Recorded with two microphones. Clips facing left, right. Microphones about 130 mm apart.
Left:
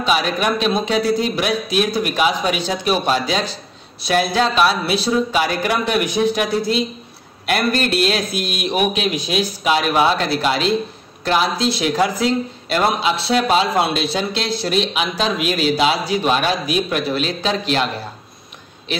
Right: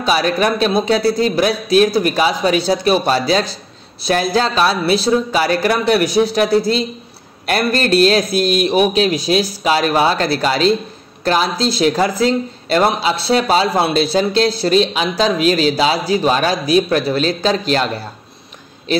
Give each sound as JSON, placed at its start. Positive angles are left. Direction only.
{"t": 0.0, "sound": "a man's voice", "side_deg": -40}